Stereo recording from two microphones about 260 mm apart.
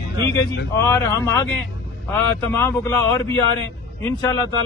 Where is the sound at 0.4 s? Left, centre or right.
Centre.